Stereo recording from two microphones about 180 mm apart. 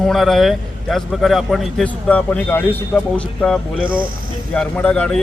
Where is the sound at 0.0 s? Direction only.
Centre (ahead or behind).